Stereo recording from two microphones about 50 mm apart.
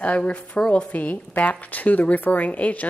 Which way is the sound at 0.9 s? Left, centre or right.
Left.